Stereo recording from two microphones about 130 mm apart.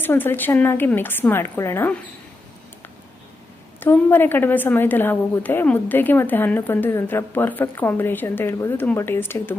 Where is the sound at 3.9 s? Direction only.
15° left (ahead or behind).